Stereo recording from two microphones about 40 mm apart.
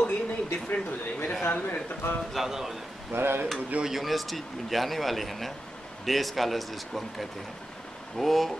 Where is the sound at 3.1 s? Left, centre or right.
Right.